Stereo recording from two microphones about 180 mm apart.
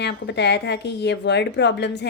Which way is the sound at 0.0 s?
70° left (ahead or behind).